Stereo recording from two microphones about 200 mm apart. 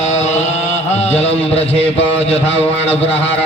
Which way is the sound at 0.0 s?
35° left (ahead or behind).